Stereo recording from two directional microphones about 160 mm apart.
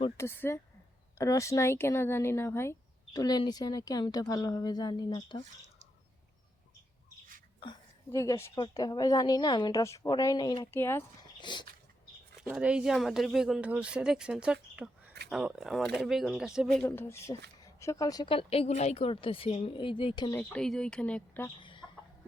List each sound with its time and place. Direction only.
0.2 s speech: 15° left (ahead or behind)
8.1 s speech: 15° left (ahead or behind)
8.5 s speech: 25° left (ahead or behind)
10.7 s speech: 15° left (ahead or behind)
11.3 s dog: 30° left (ahead or behind)
12.4 s speech: 5° right (ahead or behind)
16.8 s speech: 15° left (ahead or behind); by 20.3 s 30° left (ahead or behind)
20.3 s speech: 5° left (ahead or behind)